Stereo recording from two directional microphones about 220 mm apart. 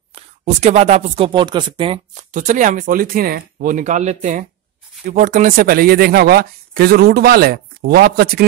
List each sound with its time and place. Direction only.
0.1 s speech: 30° right (ahead or behind)